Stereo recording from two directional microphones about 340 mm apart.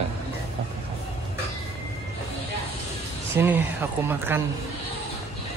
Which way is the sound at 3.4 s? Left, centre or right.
Centre.